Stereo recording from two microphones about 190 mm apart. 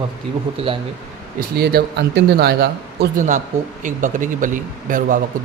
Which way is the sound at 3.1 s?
40° right (ahead or behind).